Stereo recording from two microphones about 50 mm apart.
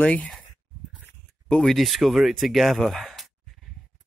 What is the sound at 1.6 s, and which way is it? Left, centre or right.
Speech, centre.